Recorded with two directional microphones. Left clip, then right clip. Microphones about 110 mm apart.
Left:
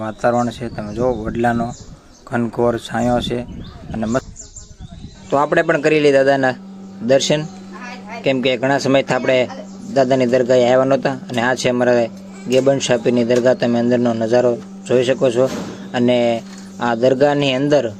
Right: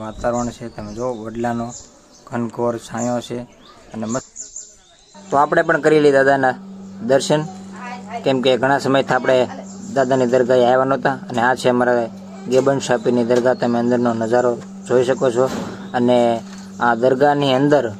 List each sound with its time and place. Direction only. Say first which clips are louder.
0.0 s a man's voice: left 4 dB; 25° left (ahead or behind)
5.7 s a man's voice: right 1 dB; 30° left (ahead or behind)